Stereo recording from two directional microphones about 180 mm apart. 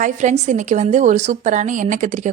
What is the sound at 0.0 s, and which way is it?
A woman's voice, 45° right (ahead or behind).